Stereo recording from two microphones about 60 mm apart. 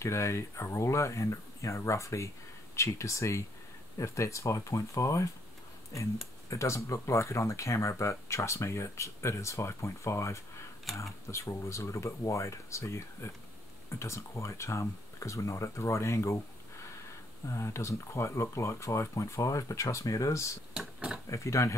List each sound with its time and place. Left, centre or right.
0.0 s speech: left
6.5 s speech: left
10.9 s speech: centre
11.2 s speech: left
17.5 s speech: left
20.7 s a sound: centre
21.3 s speech: left